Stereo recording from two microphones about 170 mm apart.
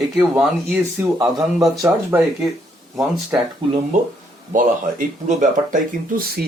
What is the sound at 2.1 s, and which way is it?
Speech, 15° right (ahead or behind).